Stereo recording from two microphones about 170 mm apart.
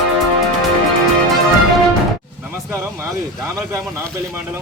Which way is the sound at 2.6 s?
15° right (ahead or behind).